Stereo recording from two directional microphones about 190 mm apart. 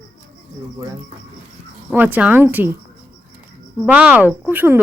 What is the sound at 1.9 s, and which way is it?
Speech, 10° right (ahead or behind).